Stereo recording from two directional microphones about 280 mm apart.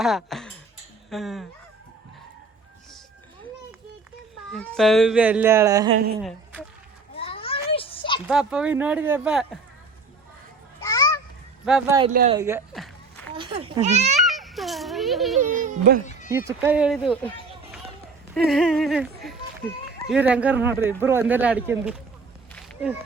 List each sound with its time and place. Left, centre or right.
0.0 s speech: centre
4.5 s speech: centre
7.2 s children playing: centre
8.3 s speech: centre
10.8 s children playing: centre
11.6 s speech: centre
12.7 s a sound: centre
13.3 s a child's voice: centre
14.2 s children playing: centre
15.4 s speech: right
16.5 s speech: centre
22.5 s a sound: centre